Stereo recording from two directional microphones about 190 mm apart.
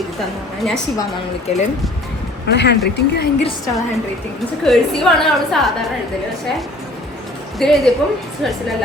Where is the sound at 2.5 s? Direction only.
60° left (ahead or behind).